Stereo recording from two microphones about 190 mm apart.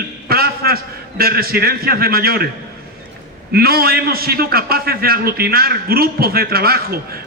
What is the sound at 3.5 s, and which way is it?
A man's voice, 55° right (ahead or behind).